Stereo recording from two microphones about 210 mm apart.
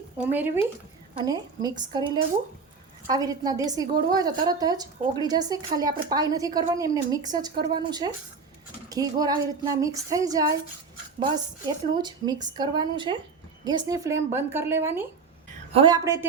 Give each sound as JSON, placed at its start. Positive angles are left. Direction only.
{"t": 0.2, "sound": "a woman's voice", "side_deg": -10}
{"t": 15.7, "sound": "a woman's voice", "side_deg": -20}